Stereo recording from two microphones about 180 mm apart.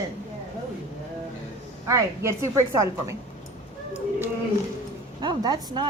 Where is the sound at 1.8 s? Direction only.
15° right (ahead or behind).